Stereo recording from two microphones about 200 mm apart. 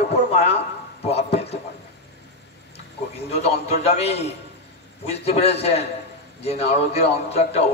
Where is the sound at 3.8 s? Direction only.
30° left (ahead or behind).